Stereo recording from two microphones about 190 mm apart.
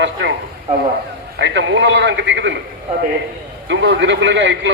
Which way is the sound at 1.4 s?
70° right (ahead or behind).